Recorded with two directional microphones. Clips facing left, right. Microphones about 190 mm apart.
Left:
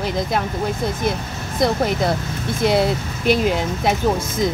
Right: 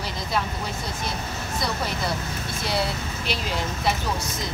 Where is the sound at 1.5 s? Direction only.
50° left (ahead or behind).